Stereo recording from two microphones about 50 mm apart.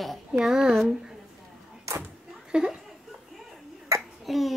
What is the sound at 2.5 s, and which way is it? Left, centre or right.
Speech, centre.